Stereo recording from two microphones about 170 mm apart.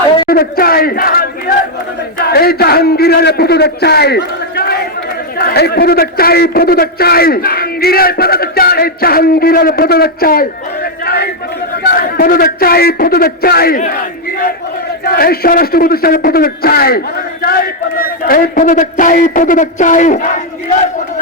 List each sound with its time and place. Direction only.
0.3 s a man's voice: 60° left (ahead or behind)
11.0 s a sound: 65° left (ahead or behind)
11.9 s a man's voice: 60° left (ahead or behind)